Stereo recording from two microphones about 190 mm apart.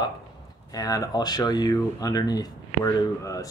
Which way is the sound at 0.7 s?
20° left (ahead or behind).